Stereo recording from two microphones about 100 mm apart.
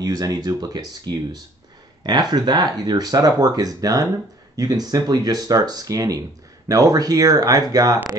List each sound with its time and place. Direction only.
0.0 s speech: 35° right (ahead or behind)